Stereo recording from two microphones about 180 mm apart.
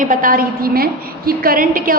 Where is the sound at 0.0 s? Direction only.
50° right (ahead or behind).